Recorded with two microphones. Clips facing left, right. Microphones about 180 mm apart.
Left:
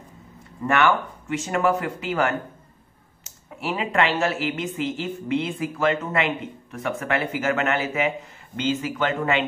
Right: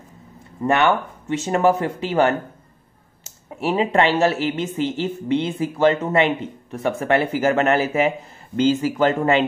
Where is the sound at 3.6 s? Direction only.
30° right (ahead or behind).